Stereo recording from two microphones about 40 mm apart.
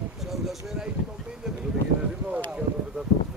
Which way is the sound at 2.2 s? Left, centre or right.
Right.